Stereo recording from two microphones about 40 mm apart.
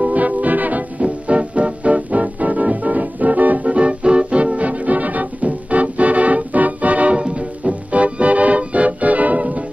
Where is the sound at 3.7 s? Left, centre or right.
Right.